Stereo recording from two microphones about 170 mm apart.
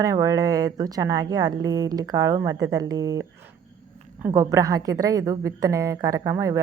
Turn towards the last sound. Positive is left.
turn(degrees=-15)  # may be behind; listen again after turning